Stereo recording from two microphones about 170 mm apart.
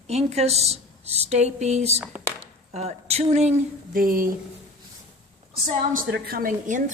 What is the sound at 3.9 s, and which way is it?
Speech, 55° right (ahead or behind).